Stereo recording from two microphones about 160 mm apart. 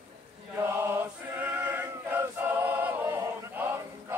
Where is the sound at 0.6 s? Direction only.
15° right (ahead or behind).